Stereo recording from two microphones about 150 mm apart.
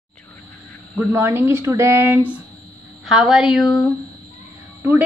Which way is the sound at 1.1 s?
15° right (ahead or behind).